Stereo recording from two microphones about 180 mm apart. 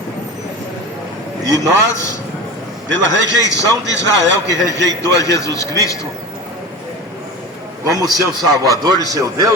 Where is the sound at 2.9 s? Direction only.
80° right.